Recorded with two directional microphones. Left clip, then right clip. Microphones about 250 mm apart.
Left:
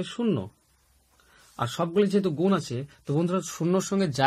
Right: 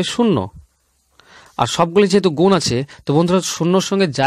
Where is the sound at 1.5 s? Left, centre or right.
Right.